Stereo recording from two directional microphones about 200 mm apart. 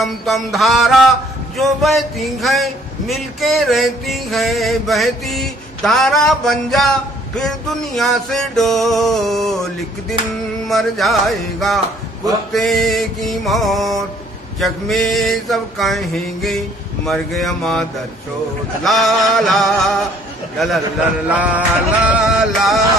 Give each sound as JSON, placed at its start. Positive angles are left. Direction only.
{"t": 0.0, "sound": "a man's voice", "side_deg": 0}
{"t": 10.7, "sound": "a man's voice", "side_deg": 0}
{"t": 18.9, "sound": "a man's voice", "side_deg": 0}
{"t": 21.3, "sound": "music", "side_deg": -5}
{"t": 22.1, "sound": "a man's voice", "side_deg": 0}